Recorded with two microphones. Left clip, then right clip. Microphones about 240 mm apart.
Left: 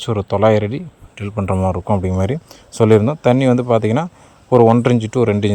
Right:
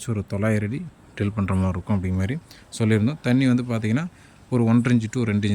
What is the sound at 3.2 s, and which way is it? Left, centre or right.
Speech, centre.